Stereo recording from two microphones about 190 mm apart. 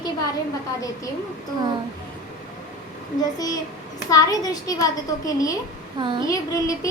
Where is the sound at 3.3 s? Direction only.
20° left (ahead or behind).